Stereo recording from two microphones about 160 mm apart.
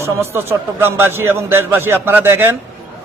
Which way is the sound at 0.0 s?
15° right (ahead or behind).